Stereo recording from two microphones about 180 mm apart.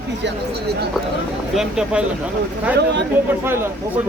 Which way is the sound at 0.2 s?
80° right.